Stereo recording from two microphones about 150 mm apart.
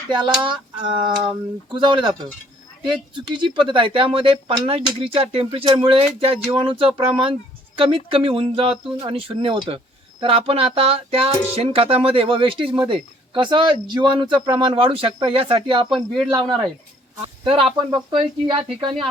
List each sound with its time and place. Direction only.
0.1 s speech: 30° right (ahead or behind)
15.9 s speech: centre (ahead or behind)
17.2 s speech: 35° right (ahead or behind)